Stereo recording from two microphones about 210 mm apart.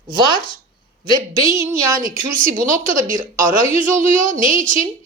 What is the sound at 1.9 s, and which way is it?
A woman's voice, 40° right (ahead or behind).